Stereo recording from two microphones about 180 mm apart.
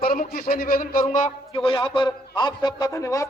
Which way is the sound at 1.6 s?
30° left (ahead or behind).